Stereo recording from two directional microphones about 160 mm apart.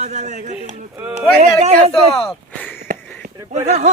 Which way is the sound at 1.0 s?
10° right (ahead or behind).